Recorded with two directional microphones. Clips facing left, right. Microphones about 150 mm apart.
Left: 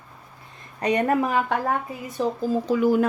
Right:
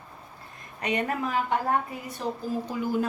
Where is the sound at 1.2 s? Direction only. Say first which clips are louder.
Left 4 dB; 60° left (ahead or behind).